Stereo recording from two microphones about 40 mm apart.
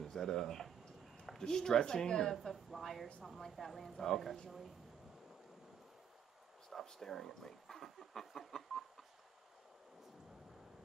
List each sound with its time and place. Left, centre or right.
0.0 s a sound: centre
1.4 s speech: centre
2.3 s speech: centre
6.7 s speech: centre